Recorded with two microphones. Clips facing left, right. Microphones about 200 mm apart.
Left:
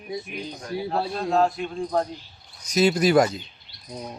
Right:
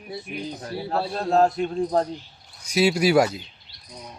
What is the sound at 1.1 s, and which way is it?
Speech, 40° right (ahead or behind).